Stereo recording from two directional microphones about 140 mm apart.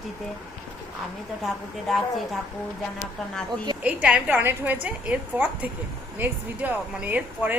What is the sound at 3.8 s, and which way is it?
Speech, 10° right (ahead or behind).